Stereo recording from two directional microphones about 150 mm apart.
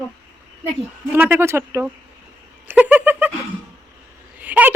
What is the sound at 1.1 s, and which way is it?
A woman's voice, 15° right (ahead or behind).